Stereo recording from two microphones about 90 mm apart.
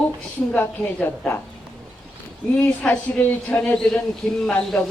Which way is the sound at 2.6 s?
20° left (ahead or behind).